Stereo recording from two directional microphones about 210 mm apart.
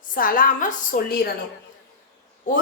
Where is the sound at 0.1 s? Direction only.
40° left (ahead or behind).